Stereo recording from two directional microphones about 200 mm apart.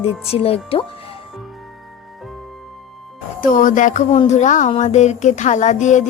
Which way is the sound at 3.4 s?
40° left (ahead or behind).